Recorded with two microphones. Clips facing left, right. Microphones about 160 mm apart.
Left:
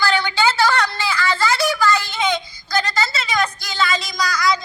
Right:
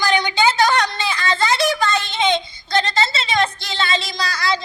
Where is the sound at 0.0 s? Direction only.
15° right (ahead or behind).